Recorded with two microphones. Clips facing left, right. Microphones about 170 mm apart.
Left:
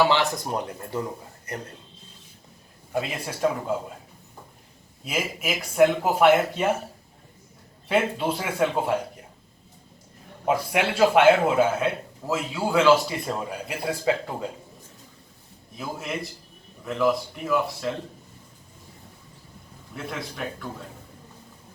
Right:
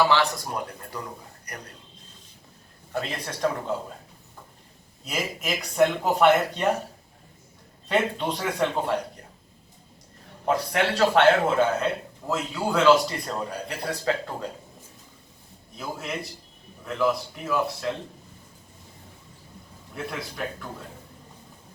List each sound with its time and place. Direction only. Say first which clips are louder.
0.0 s speech: left 1 dB; 20° left (ahead or behind)
2.9 s a man's voice: left 2 dB; 10° left (ahead or behind)
5.0 s a man's voice: left 1 dB; 5° left (ahead or behind)
7.9 s a man's voice: left 1 dB; 5° left (ahead or behind)
10.4 s a man's voice: left 1 dB; 10° left (ahead or behind)
15.8 s a man's voice: left 1 dB; centre (ahead or behind)
19.9 s a man's voice: even; centre (ahead or behind)